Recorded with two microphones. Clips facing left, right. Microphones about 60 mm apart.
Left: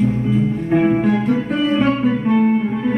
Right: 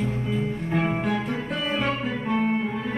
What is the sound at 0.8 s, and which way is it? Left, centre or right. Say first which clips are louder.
Guitar: left 10 dB; centre.